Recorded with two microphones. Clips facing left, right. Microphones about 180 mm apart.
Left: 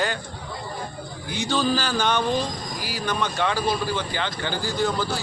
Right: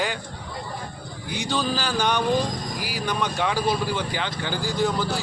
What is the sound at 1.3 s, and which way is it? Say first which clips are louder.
Speech: left 3 dB; 15° right (ahead or behind).